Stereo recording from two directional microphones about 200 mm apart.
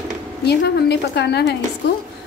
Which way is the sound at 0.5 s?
55° left (ahead or behind).